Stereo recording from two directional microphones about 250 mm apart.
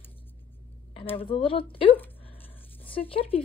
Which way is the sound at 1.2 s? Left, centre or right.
Left.